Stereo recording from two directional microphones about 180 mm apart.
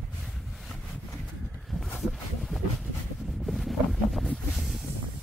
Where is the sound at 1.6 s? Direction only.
Centre (ahead or behind).